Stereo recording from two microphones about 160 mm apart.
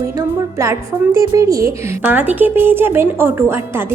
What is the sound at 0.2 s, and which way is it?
A woman's voice, 20° right (ahead or behind).